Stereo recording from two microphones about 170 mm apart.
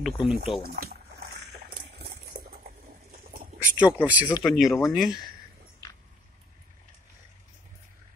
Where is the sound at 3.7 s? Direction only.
10° right (ahead or behind).